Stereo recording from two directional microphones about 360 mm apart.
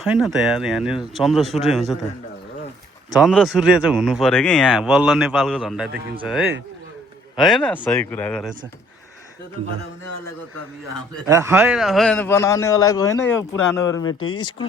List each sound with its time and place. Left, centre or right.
0.0 s speech: centre
3.2 s speech: centre
11.3 s a man's voice: centre
14.1 s speech: left
14.3 s a man's voice: centre